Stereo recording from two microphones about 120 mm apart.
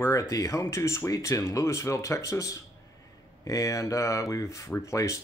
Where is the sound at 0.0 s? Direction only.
25° left (ahead or behind).